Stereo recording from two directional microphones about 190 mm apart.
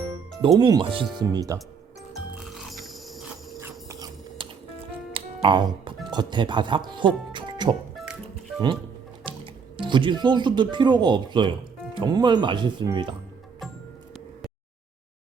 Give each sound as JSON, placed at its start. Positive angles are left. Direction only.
{"t": 0.4, "sound": "speech", "side_deg": -20}
{"t": 2.4, "sound": "music", "side_deg": 0}
{"t": 3.6, "sound": "a sound", "side_deg": -15}
{"t": 4.4, "sound": "music", "side_deg": -25}
{"t": 6.1, "sound": "speech", "side_deg": -25}
{"t": 7.3, "sound": "music", "side_deg": -25}
{"t": 7.9, "sound": "music", "side_deg": 0}
{"t": 9.2, "sound": "speech", "side_deg": -25}